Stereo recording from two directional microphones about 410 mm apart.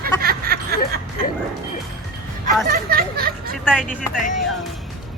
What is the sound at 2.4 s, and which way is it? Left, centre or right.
Speech, right.